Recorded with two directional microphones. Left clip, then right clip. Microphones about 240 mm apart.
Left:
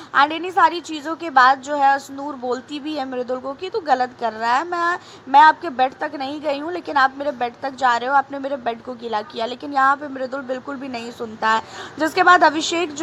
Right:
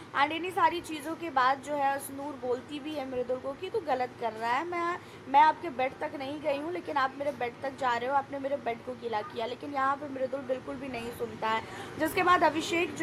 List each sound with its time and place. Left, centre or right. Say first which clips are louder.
0.1 s speech: left 11 dB; left